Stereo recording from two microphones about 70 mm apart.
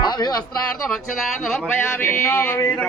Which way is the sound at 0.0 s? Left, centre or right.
Left.